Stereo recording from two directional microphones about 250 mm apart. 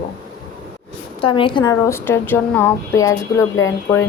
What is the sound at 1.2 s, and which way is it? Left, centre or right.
Speech, centre.